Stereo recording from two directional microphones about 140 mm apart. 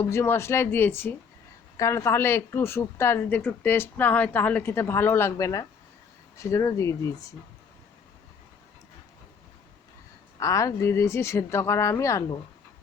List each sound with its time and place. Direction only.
0.0 s speech: 15° left (ahead or behind)
10.4 s speech: 20° left (ahead or behind)